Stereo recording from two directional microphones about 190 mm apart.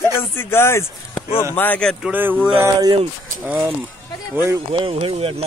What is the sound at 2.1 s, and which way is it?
Speech, 10° right (ahead or behind).